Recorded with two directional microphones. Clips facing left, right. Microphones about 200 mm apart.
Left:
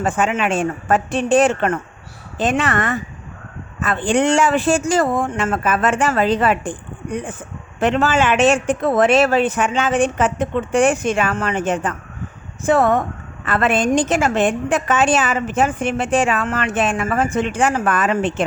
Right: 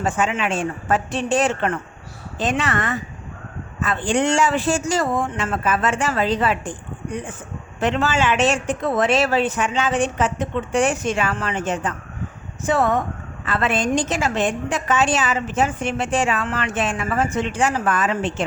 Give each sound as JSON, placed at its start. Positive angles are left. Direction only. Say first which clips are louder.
{"t": 0.0, "sound": "a woman's voice", "louder": "left 3 dB", "side_deg": 55}
{"t": 7.8, "sound": "a woman's voice", "louder": "left 4 dB", "side_deg": 55}